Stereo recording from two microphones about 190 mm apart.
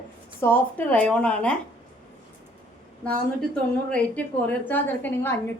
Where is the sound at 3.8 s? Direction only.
5° left (ahead or behind).